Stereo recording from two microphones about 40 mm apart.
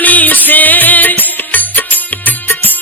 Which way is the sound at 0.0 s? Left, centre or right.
Left.